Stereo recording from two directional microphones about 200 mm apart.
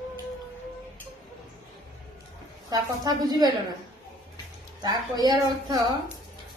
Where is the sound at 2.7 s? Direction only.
20° right (ahead or behind).